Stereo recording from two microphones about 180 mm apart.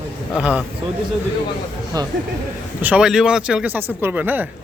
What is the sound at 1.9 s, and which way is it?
Speech, 20° right (ahead or behind).